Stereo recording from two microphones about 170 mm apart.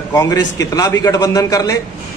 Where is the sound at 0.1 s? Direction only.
20° left (ahead or behind).